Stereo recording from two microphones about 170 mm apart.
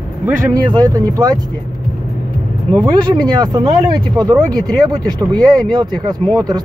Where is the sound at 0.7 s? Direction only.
20° right (ahead or behind).